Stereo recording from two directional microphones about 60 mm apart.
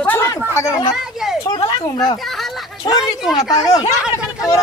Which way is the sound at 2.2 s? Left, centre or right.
Centre.